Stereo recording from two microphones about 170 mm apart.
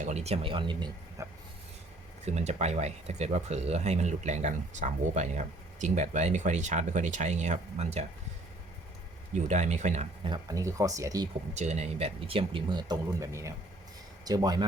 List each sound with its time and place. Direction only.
0.0 s speech: 40° right (ahead or behind)
1.2 s dog: 15° right (ahead or behind)
2.2 s speech: 40° right (ahead or behind)
9.3 s speech: 45° right (ahead or behind)
10.2 s speech: 25° right (ahead or behind)
11.5 s speech: 40° right (ahead or behind); by 14.6 s 20° right (ahead or behind)